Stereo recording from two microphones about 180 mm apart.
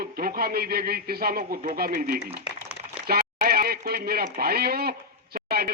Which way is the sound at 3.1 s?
55° right (ahead or behind).